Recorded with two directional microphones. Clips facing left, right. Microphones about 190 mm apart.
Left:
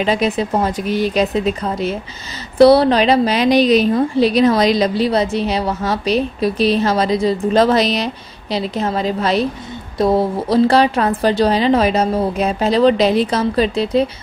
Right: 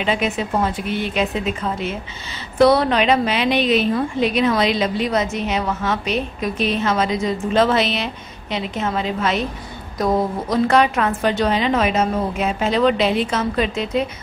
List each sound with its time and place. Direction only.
0.0 s a woman's voice: 35° left (ahead or behind)